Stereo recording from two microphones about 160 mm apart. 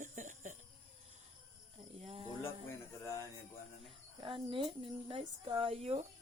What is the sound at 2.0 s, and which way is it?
Snake, 40° right (ahead or behind).